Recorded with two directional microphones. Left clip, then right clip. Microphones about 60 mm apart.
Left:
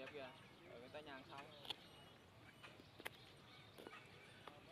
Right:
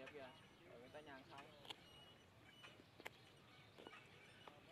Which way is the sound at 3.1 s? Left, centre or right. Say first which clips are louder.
Left 3 dB; left.